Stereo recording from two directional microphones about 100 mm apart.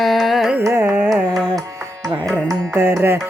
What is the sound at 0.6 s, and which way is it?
Carnatic music, 25° right (ahead or behind).